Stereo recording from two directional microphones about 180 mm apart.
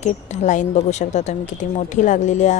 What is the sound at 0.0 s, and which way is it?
A woman's voice, 40° left (ahead or behind).